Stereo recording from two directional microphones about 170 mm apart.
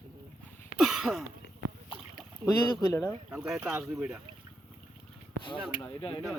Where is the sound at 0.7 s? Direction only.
Centre (ahead or behind).